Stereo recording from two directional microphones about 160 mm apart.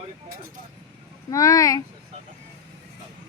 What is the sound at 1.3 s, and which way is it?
Speech, 20° left (ahead or behind).